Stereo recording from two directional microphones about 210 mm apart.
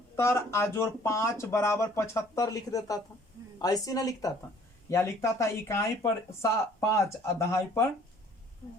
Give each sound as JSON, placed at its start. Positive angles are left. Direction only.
{"t": 0.2, "sound": "speech", "side_deg": 10}